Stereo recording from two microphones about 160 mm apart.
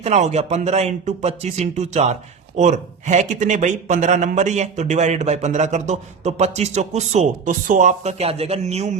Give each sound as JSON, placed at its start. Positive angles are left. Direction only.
{"t": 0.0, "sound": "a man's voice", "side_deg": -45}